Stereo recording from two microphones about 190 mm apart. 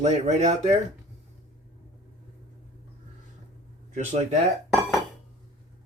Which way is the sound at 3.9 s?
35° right (ahead or behind).